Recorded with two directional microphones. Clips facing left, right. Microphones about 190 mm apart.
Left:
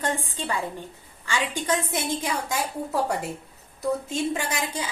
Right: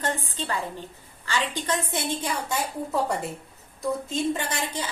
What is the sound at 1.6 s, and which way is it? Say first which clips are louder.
A woman's voice: left 2 dB; 10° left (ahead or behind).